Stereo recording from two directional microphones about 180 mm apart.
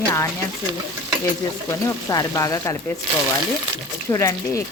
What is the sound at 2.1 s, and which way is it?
Speech, 20° left (ahead or behind).